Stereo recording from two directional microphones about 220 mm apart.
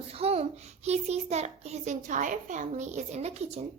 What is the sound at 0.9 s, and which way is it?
A child's voice, 30° right (ahead or behind).